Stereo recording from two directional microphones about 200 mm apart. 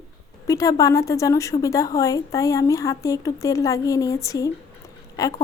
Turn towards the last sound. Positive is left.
turn(degrees=15)  # may be behind; listen again after turning